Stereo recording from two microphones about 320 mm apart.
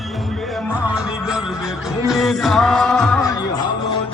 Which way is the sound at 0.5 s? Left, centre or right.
Centre.